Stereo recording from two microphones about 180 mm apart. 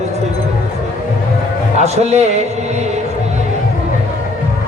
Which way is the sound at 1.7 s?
40° right (ahead or behind).